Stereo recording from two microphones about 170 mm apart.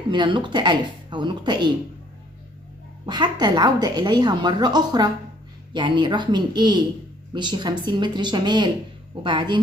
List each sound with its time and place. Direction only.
0.1 s a woman's voice: 25° right (ahead or behind)
3.1 s a woman's voice: 25° right (ahead or behind)